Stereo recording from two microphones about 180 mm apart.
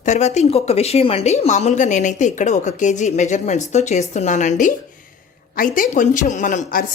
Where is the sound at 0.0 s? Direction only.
40° left (ahead or behind).